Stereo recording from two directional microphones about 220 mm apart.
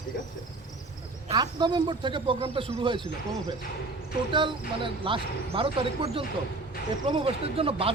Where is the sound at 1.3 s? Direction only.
20° right (ahead or behind).